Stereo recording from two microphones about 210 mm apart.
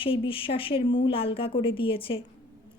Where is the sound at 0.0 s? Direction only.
25° left (ahead or behind).